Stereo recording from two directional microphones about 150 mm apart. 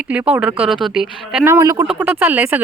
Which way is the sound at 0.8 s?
5° right (ahead or behind).